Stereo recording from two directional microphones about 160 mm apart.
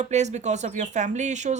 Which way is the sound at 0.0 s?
45° right (ahead or behind).